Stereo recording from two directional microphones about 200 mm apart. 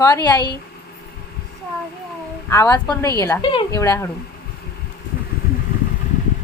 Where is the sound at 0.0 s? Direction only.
20° left (ahead or behind).